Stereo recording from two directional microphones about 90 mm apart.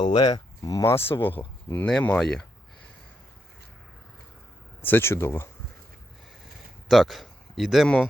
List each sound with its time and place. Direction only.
0.0 s speech: 55° left (ahead or behind); by 1.9 s 20° left (ahead or behind)
1.9 s speech: 10° left (ahead or behind)
4.8 s speech: 25° left (ahead or behind)
6.8 s a man's voice: centre (ahead or behind)